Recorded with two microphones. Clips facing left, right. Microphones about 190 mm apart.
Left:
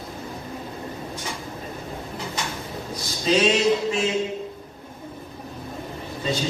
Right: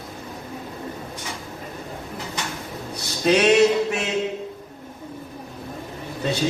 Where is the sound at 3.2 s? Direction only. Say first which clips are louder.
Right 4 dB; 65° right (ahead or behind).